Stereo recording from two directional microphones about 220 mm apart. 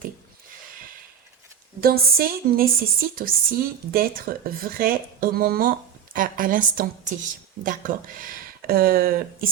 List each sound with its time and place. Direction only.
1.8 s speech: 45° right (ahead or behind)